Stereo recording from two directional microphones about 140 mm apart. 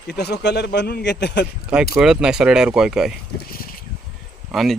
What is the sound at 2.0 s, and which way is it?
A man's voice, 5° right (ahead or behind).